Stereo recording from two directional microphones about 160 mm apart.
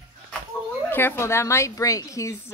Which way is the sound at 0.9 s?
15° left (ahead or behind).